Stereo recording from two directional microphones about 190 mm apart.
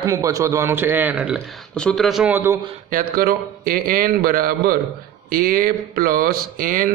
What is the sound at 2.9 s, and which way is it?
Speech, 50° right (ahead or behind).